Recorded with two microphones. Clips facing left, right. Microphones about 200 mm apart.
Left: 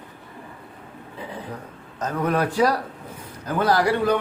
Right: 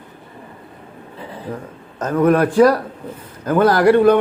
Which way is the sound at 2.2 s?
55° right (ahead or behind).